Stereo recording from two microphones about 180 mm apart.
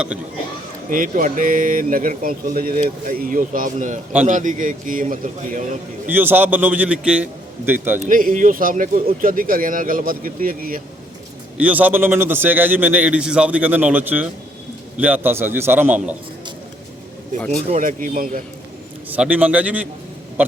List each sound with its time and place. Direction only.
0.9 s speech: 50° right (ahead or behind)
6.1 s a man's voice: 10° right (ahead or behind)
8.0 s speech: 50° right (ahead or behind)
11.5 s a man's voice: 10° right (ahead or behind)
17.7 s speech: 45° right (ahead or behind)
19.1 s a man's voice: 10° right (ahead or behind)